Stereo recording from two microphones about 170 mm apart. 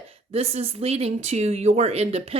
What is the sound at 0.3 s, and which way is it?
A woman's voice, 35° right (ahead or behind).